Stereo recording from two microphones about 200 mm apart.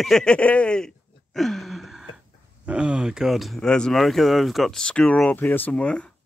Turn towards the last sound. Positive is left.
turn(degrees=5)  # may be behind; listen again after turning